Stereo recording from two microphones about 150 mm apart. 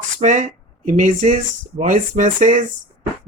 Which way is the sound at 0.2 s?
55° right (ahead or behind).